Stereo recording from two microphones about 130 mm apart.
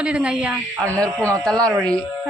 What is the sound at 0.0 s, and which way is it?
Speech, 10° right (ahead or behind).